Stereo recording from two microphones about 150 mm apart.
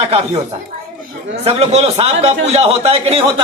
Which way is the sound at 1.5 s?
45° right (ahead or behind).